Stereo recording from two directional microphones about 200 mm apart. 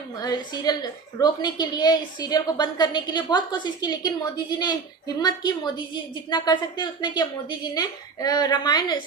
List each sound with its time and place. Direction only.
0.2 s a woman's voice: 20° left (ahead or behind)